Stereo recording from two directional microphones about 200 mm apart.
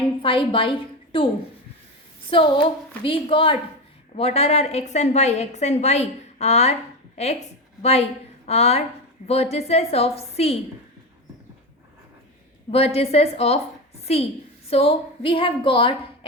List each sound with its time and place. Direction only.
0.2 s a woman's voice: 25° left (ahead or behind)
2.3 s a woman's voice: 25° left (ahead or behind)
7.8 s a woman's voice: 30° left (ahead or behind)
12.7 s a woman's voice: 30° left (ahead or behind)